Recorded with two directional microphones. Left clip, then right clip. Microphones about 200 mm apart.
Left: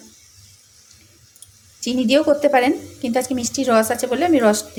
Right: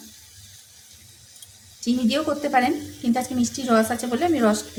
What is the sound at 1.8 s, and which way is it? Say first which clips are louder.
Speech: left 6 dB; 35° left (ahead or behind).